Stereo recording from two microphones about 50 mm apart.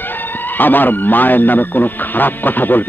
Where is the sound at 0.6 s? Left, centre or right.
Left.